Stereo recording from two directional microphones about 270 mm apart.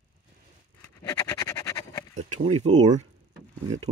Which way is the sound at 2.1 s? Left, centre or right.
Right.